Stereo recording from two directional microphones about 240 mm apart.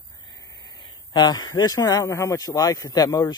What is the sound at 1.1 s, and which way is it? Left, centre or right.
Speech, centre.